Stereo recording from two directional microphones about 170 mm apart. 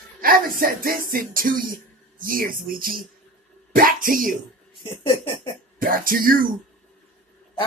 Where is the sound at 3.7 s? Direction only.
55° right (ahead or behind).